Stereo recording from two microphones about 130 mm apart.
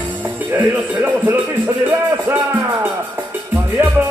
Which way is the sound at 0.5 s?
15° right (ahead or behind).